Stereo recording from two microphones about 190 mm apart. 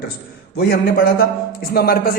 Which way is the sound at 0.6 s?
55° left (ahead or behind).